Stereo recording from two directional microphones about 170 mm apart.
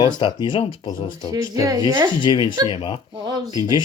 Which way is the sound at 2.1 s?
25° left (ahead or behind).